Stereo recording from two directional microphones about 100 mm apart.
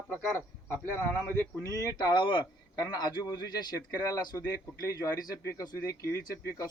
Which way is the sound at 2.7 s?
45° left (ahead or behind).